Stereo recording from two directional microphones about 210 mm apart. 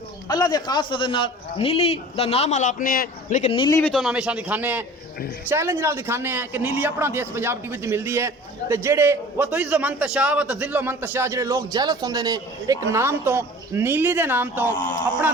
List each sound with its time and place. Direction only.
0.3 s a man's voice: 20° left (ahead or behind); by 3.5 s 40° left (ahead or behind)
3.5 s a man's voice: 25° left (ahead or behind)
3.8 s a man's voice: 5° left (ahead or behind)